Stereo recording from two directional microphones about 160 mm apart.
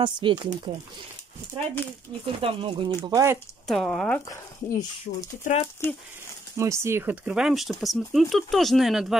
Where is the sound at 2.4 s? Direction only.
35° right (ahead or behind).